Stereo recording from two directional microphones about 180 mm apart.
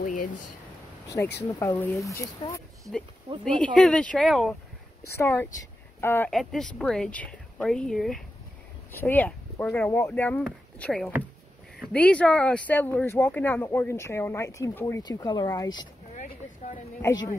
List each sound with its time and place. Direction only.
0.0 s speech: 45° left (ahead or behind)
1.0 s speech: 15° left (ahead or behind)
3.5 s speech: 5° left (ahead or behind)
5.0 s speech: 15° left (ahead or behind)
6.3 s speech: centre (ahead or behind); by 15.9 s 20° left (ahead or behind)
17.0 s speech: 20° left (ahead or behind)